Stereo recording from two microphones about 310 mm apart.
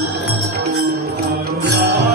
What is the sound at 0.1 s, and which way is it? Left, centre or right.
Music, right.